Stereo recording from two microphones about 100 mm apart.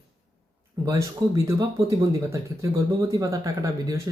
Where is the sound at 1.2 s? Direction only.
45° right (ahead or behind).